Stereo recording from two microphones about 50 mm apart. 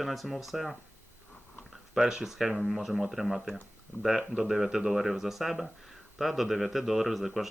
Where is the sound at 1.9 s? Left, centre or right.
Centre.